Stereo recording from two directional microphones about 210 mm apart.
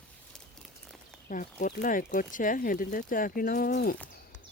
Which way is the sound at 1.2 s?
40° left (ahead or behind).